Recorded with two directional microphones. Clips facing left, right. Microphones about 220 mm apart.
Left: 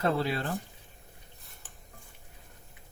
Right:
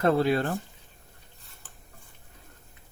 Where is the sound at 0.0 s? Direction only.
50° right (ahead or behind).